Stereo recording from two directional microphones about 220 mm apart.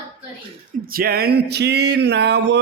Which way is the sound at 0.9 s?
40° right (ahead or behind).